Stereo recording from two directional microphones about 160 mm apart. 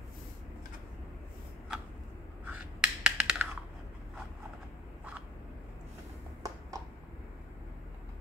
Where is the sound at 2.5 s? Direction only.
5° right (ahead or behind).